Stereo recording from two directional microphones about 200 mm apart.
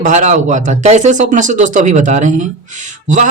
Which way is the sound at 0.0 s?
35° right (ahead or behind).